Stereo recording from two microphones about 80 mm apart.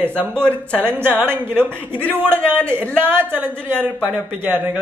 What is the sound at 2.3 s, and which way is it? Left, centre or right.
Speech, centre.